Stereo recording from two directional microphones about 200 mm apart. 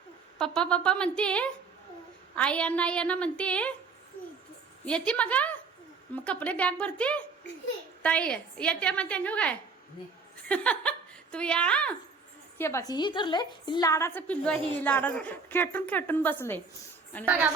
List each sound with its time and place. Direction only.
0.3 s a woman's voice: 5° left (ahead or behind)
4.9 s a woman's voice: 5° left (ahead or behind)
17.2 s a woman's voice: 10° right (ahead or behind)